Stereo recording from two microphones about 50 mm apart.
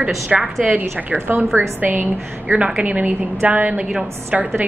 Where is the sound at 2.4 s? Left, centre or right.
Centre.